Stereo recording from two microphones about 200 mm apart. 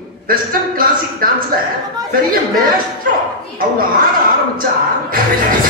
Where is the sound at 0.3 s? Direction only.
45° right (ahead or behind).